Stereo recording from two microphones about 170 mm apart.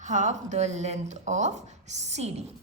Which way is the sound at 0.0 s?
45° right (ahead or behind).